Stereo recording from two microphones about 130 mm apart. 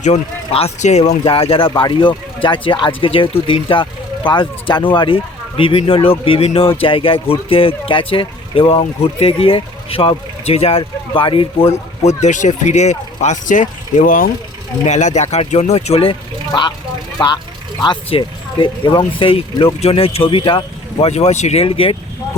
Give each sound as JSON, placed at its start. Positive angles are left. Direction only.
{"t": 0.5, "sound": "speech", "side_deg": 55}
{"t": 1.2, "sound": "speech", "side_deg": 45}
{"t": 12.0, "sound": "speech", "side_deg": 65}
{"t": 14.8, "sound": "speech", "side_deg": 65}
{"t": 16.5, "sound": "speech", "side_deg": 35}
{"t": 21.1, "sound": "speech", "side_deg": 55}